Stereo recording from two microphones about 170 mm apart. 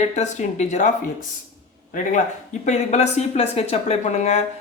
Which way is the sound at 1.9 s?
45° left (ahead or behind).